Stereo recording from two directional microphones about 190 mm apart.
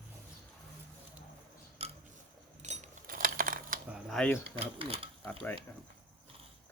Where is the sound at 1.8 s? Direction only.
30° right (ahead or behind); by 3.8 s 45° right (ahead or behind).